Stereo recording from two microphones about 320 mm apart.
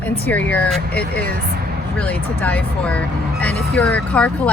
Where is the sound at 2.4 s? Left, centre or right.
Centre.